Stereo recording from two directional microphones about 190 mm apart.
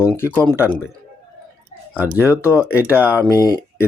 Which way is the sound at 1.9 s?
10° right (ahead or behind).